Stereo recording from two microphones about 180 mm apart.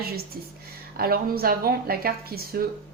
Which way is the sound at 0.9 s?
55° right (ahead or behind).